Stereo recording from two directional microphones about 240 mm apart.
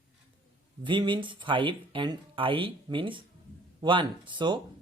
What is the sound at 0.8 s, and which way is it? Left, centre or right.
Speech, centre.